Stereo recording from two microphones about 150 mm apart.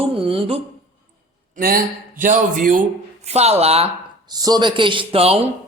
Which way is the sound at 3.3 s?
45° right (ahead or behind).